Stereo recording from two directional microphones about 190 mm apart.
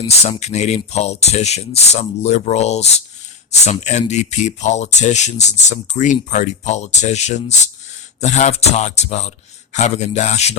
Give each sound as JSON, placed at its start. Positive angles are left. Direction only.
{"t": 0.0, "sound": "speech", "side_deg": 35}